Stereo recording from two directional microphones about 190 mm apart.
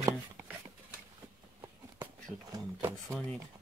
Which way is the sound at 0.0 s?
15° right (ahead or behind).